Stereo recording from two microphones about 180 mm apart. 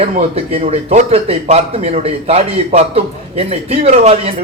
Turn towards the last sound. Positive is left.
turn(degrees=-35)  # may be behind; listen again after turning